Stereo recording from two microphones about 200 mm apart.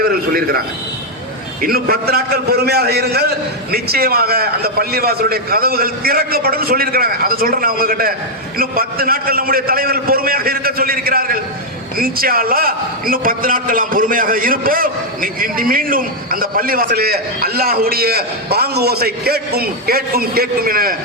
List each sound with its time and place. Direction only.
0.0 s a man's voice: 50° right (ahead or behind)
1.6 s a man's voice: 50° right (ahead or behind)